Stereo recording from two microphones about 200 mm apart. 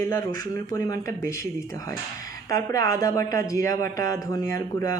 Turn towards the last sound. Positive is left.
turn(degrees=15)  # may be behind; listen again after turning